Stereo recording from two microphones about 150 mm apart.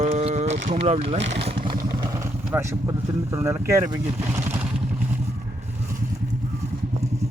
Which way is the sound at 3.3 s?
15° right (ahead or behind).